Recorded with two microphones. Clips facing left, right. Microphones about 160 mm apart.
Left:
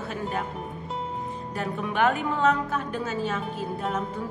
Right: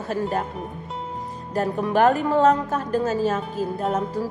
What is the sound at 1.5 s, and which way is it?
A woman's voice, 40° right (ahead or behind).